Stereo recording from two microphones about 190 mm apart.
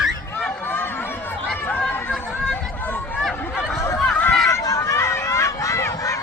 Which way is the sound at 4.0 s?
5° left (ahead or behind).